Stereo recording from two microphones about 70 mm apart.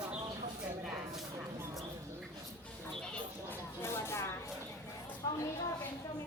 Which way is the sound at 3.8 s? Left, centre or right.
Left.